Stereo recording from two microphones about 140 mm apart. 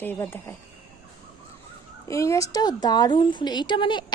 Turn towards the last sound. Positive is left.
turn(degrees=30)  # may be behind; listen again after turning